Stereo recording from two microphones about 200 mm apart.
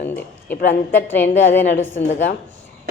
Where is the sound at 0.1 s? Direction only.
10° left (ahead or behind).